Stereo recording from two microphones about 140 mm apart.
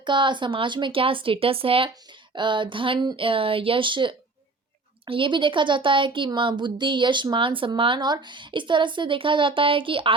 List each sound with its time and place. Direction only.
0.0 s speech: 35° right (ahead or behind)